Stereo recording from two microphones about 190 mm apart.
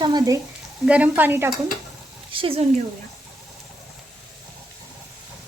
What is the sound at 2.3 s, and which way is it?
Speech, 30° right (ahead or behind).